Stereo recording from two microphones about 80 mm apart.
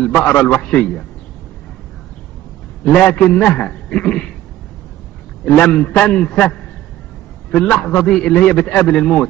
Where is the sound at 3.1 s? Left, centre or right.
Centre.